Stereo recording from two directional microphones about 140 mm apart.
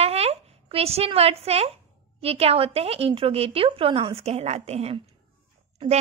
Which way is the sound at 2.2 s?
45° right (ahead or behind).